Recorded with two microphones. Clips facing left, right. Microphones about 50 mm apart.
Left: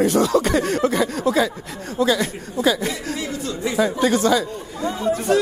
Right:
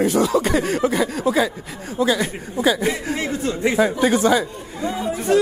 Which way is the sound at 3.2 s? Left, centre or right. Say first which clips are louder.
Right 4 dB; right.